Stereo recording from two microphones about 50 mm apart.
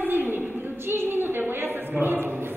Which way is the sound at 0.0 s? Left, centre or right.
Right.